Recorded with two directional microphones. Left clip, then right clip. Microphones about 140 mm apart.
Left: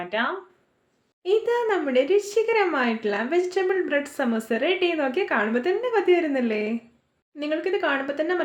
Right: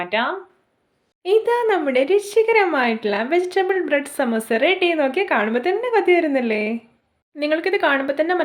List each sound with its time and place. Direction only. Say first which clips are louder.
0.0 s speech: right 5 dB; 25° right (ahead or behind)